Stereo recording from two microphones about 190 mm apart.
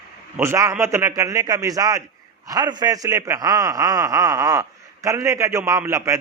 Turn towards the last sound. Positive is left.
turn(degrees=-15)  # may be behind; listen again after turning